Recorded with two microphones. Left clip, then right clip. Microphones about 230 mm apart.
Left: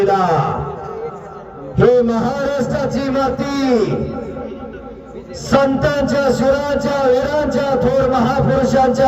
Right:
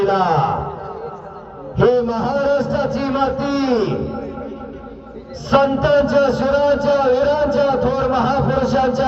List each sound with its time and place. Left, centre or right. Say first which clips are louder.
0.0 s speech: left 1 dB; left
1.8 s a sound: left 3 dB; left
5.5 s a man's voice: even; left